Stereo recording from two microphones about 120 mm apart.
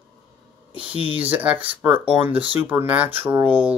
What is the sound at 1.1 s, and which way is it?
Speech, 10° right (ahead or behind).